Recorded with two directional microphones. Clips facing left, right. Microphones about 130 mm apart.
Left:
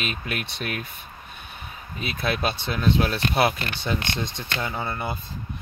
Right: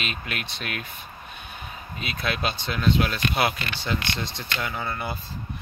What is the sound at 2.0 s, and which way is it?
Speech, 30° left (ahead or behind).